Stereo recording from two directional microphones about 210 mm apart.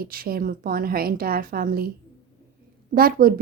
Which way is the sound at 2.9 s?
45° right (ahead or behind).